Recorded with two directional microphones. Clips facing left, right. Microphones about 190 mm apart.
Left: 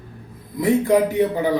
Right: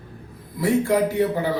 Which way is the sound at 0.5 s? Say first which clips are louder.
Left 3 dB; 20° left (ahead or behind).